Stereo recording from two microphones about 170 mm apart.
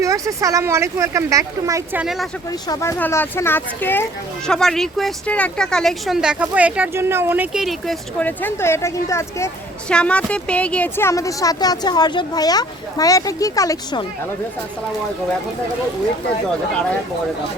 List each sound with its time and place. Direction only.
0.0 s speech: 20° right (ahead or behind)
2.5 s a woman's voice: 20° left (ahead or behind)